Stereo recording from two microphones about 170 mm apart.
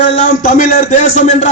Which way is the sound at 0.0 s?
45° left (ahead or behind).